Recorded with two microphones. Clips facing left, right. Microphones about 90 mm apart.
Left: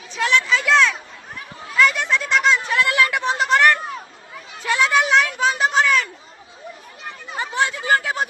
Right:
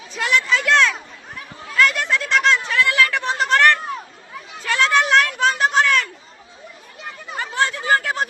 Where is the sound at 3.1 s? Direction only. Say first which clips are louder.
Left 1 dB; centre (ahead or behind).